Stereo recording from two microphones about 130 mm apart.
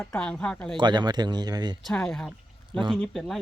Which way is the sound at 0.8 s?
35° right (ahead or behind).